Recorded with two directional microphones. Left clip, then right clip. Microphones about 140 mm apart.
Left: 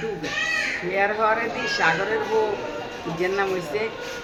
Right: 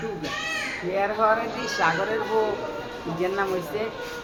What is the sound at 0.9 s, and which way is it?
Speech, 5° right (ahead or behind).